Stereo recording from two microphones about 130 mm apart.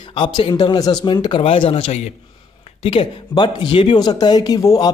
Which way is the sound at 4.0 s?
30° left (ahead or behind).